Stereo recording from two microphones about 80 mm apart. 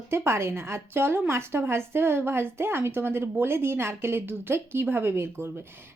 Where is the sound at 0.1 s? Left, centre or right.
Right.